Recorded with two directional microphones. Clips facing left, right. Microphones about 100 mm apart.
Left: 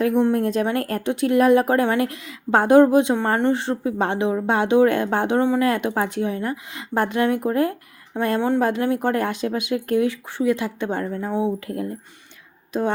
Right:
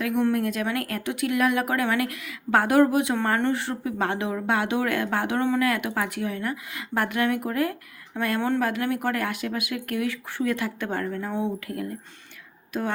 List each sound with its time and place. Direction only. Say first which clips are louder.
0.0 s speech: left 5 dB; 25° left (ahead or behind)
11.6 s speech: left 4 dB; 25° left (ahead or behind)